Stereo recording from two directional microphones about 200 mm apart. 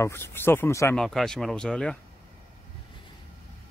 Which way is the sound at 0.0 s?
10° left (ahead or behind).